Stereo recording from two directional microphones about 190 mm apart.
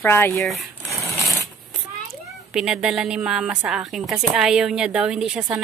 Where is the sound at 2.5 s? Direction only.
5° right (ahead or behind).